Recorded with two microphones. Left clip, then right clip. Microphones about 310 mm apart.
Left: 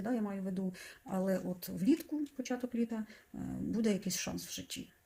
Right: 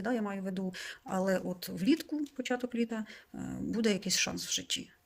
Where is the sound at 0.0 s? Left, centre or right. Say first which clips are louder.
Right 4 dB; right.